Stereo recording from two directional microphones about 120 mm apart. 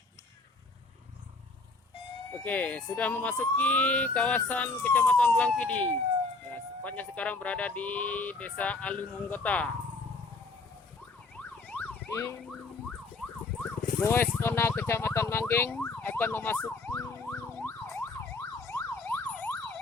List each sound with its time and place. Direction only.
2.4 s speech: 10° left (ahead or behind)
11.3 s emergency vehicle: 10° left (ahead or behind)
14.0 s speech: 20° left (ahead or behind)
15.7 s emergency vehicle: 15° left (ahead or behind)